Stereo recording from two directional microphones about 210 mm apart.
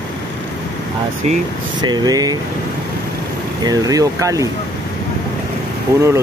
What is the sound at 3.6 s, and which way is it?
Speech, 15° right (ahead or behind).